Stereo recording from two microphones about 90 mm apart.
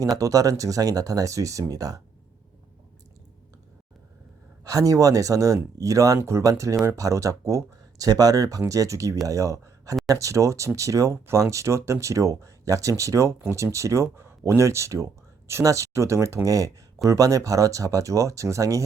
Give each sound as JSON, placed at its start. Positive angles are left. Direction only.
{"t": 0.0, "sound": "speech", "side_deg": -40}
{"t": 4.6, "sound": "speech", "side_deg": -40}